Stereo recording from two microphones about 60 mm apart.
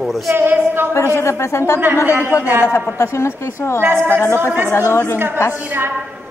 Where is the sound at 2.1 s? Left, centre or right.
Right.